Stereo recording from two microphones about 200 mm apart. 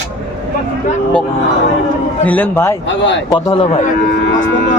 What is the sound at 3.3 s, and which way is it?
Speech, 25° left (ahead or behind).